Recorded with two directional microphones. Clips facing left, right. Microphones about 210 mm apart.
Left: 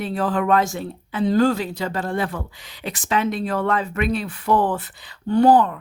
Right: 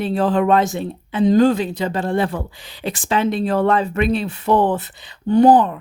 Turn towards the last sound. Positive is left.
turn(degrees=-20)  # may be behind; listen again after turning